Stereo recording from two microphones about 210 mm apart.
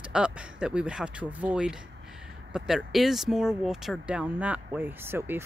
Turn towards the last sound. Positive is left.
turn(degrees=-10)  # may be behind; listen again after turning